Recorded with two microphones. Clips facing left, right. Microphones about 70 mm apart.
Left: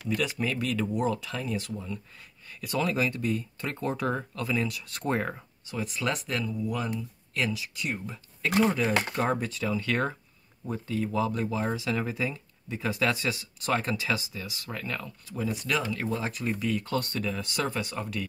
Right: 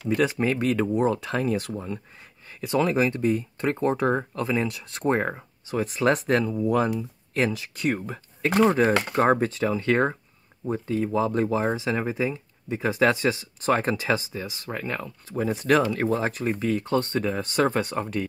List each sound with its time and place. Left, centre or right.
0.1 s speech: right
2.6 s speech: right
7.0 s speech: right